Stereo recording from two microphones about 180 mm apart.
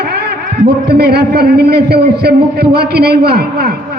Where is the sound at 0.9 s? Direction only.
60° right (ahead or behind).